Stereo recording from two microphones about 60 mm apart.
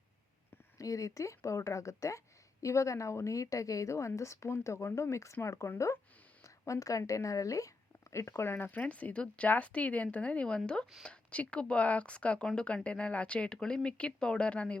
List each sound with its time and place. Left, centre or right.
0.8 s speech: left
6.4 s a sound: left
7.1 s a woman's voice: left
8.1 s speech: left; by 14.8 s centre